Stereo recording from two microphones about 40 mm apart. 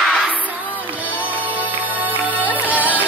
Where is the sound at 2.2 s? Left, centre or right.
Right.